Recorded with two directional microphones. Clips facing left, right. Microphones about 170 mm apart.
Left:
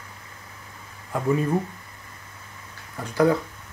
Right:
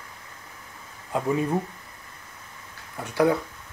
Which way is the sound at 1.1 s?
20° right (ahead or behind).